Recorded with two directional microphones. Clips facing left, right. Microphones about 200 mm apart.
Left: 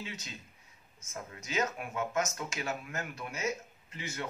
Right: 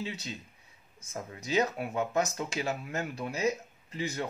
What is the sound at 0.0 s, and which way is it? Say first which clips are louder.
Speech: right 6 dB; 35° right (ahead or behind).